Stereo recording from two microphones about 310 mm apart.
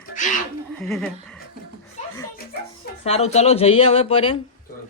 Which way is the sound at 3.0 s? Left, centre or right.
Centre.